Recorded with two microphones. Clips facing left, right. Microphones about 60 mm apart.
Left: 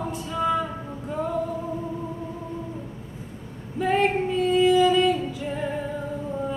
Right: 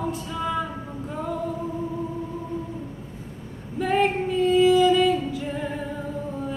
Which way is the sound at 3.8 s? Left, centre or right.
Centre.